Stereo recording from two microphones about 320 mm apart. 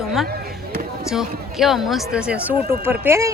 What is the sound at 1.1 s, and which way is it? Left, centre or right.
Speech, centre.